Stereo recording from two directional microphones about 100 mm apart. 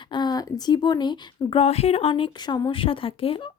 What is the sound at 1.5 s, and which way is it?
Speech, 85° left.